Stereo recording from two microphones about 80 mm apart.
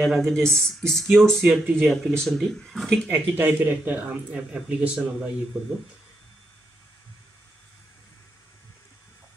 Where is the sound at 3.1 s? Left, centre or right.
Right.